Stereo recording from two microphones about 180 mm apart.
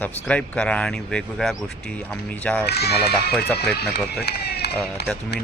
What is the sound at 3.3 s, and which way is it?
Speech, 5° left (ahead or behind).